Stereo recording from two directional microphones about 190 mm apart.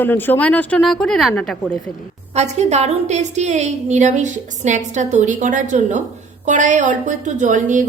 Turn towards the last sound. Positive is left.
turn(degrees=-40)  # may be behind; listen again after turning